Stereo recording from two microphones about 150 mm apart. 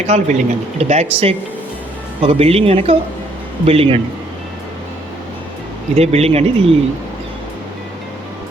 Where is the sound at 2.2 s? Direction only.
40° right (ahead or behind).